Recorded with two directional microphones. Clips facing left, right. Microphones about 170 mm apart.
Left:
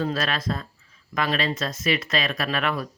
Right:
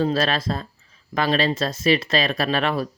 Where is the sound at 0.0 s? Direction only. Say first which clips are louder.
Right 5 dB; 30° right (ahead or behind).